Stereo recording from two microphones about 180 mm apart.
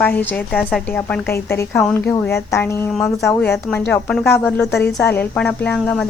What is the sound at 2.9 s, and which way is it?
Speech, centre (ahead or behind).